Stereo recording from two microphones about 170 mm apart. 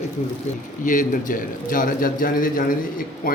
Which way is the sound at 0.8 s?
50° left (ahead or behind).